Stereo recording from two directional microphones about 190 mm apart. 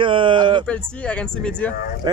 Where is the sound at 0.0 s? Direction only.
25° right (ahead or behind).